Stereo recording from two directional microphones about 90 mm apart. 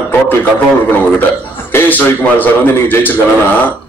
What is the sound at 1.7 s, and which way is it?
A man's voice, 20° left (ahead or behind).